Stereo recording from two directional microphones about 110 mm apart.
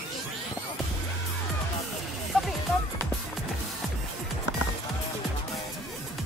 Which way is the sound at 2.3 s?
Centre (ahead or behind).